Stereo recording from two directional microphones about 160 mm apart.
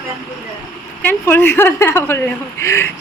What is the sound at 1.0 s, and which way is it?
Speech, 10° left (ahead or behind).